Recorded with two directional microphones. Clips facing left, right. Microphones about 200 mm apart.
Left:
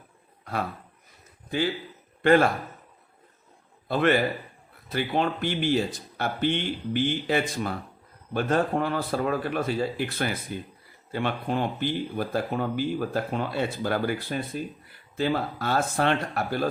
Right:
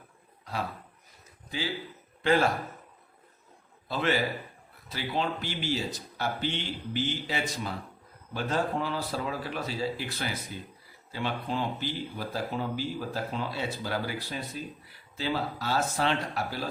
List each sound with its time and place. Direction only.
0.5 s a man's voice: 55° left (ahead or behind)
3.8 s speech: 55° left (ahead or behind)